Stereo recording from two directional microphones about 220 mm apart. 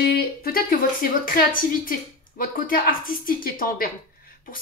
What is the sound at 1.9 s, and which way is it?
A woman's voice, 40° left (ahead or behind).